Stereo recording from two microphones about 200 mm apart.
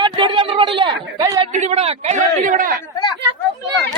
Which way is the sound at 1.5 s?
35° right (ahead or behind).